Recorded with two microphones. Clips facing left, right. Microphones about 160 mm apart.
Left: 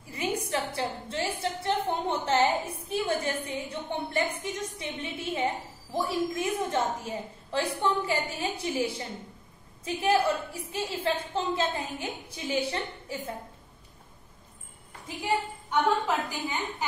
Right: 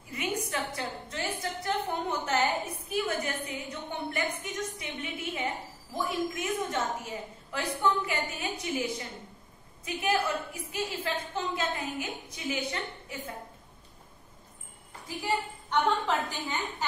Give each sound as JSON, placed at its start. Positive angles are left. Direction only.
{"t": 0.1, "sound": "a sound", "side_deg": 30}
{"t": 4.4, "sound": "a woman's voice", "side_deg": 30}
{"t": 15.7, "sound": "a woman's voice", "side_deg": 10}